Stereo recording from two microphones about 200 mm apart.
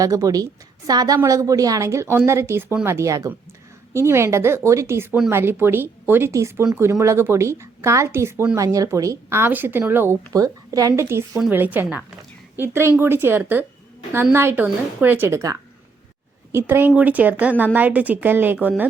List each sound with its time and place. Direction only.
0.0 s speech: 15° right (ahead or behind)